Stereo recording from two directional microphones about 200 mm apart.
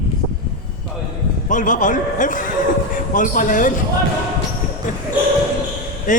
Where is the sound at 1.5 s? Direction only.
40° left (ahead or behind).